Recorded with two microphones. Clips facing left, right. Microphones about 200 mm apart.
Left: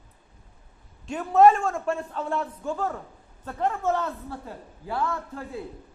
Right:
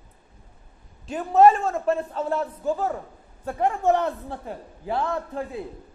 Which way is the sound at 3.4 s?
15° right (ahead or behind).